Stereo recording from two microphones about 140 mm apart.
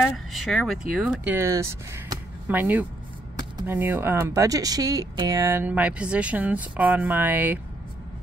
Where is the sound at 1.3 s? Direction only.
20° right (ahead or behind).